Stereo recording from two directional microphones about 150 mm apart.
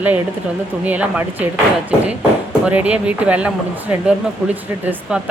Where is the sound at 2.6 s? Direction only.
10° right (ahead or behind).